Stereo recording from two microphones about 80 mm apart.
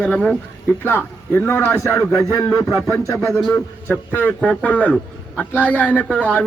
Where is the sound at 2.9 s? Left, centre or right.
Left.